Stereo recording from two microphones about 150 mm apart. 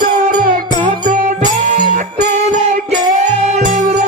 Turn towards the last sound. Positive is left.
turn(degrees=-50)  # may be behind; listen again after turning